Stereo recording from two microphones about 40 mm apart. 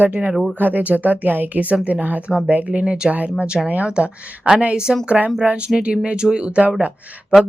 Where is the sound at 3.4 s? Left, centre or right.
Right.